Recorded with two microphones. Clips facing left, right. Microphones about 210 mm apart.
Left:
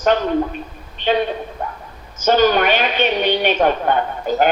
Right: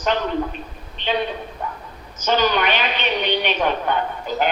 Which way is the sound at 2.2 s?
50° left (ahead or behind).